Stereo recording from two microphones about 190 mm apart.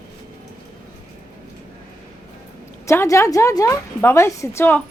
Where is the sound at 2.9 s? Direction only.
15° left (ahead or behind).